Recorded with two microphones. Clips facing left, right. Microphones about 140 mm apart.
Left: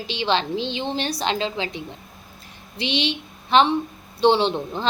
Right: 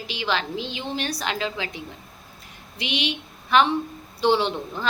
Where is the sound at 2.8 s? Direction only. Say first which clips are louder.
Left 4 dB; 30° left (ahead or behind).